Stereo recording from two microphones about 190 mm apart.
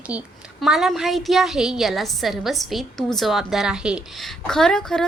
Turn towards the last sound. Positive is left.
turn(degrees=0)  # may be behind; listen again after turning